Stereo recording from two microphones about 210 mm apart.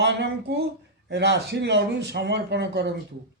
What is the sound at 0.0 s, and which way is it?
Speech, 50° right (ahead or behind).